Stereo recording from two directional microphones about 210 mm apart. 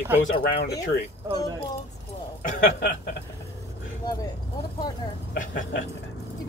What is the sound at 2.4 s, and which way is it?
Speech, 40° left (ahead or behind).